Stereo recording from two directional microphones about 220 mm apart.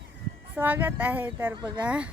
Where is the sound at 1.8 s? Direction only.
5° right (ahead or behind).